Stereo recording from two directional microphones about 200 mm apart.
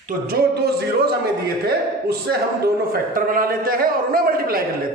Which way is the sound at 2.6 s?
45° right (ahead or behind).